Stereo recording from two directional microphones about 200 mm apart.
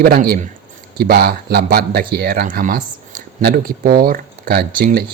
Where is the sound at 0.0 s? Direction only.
50° right (ahead or behind).